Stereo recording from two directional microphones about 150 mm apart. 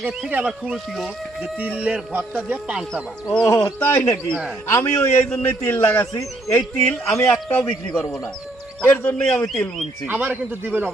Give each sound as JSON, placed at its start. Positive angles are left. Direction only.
{"t": 0.2, "sound": "speech", "side_deg": -10}
{"t": 3.4, "sound": "a man's voice", "side_deg": 15}
{"t": 9.5, "sound": "speech", "side_deg": 0}
{"t": 10.1, "sound": "speech", "side_deg": -10}